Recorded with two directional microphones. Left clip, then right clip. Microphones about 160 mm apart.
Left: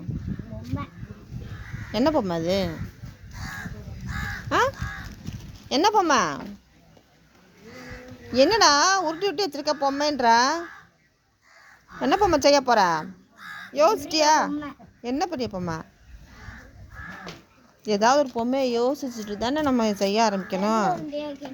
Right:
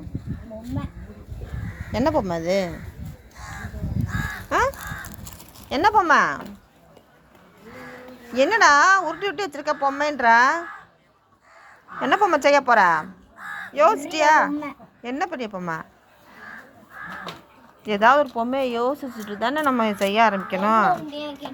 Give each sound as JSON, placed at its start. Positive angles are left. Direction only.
{"t": 1.9, "sound": "speech", "side_deg": 10}
{"t": 4.4, "sound": "speech", "side_deg": 10}
{"t": 5.6, "sound": "speech", "side_deg": 25}
{"t": 8.3, "sound": "a woman's voice", "side_deg": 30}
{"t": 11.9, "sound": "a woman's voice", "side_deg": 30}
{"t": 17.8, "sound": "a woman's voice", "side_deg": 30}
{"t": 18.8, "sound": "speech", "side_deg": 0}
{"t": 19.1, "sound": "speech", "side_deg": 35}